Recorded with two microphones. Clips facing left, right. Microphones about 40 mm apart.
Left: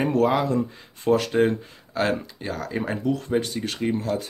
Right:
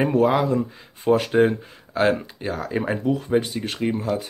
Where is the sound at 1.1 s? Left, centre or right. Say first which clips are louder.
Right 2 dB; centre.